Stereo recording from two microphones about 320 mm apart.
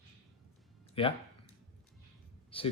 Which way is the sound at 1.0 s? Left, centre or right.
Centre.